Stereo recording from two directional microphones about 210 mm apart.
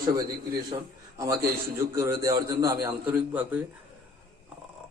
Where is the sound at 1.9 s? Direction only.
15° right (ahead or behind).